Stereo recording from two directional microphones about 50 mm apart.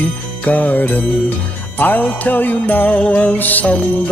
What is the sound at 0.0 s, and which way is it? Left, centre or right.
Music, left.